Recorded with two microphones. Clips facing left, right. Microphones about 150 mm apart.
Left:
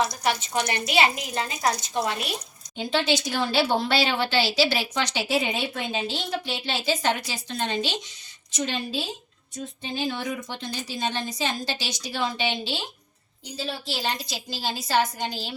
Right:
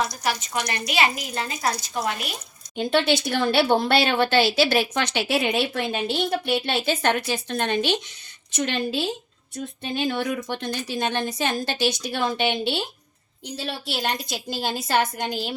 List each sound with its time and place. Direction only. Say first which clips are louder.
0.0 s a woman's voice: left 1 dB; 30° left (ahead or behind)
2.7 s speech: right 3 dB; 55° right (ahead or behind)